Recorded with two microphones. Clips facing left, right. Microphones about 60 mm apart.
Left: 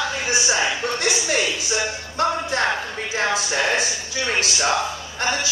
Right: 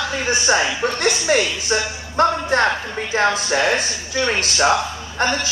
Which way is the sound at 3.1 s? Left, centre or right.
Right.